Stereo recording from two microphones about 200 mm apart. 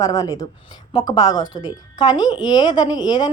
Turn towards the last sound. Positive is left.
turn(degrees=20)  # may be behind; listen again after turning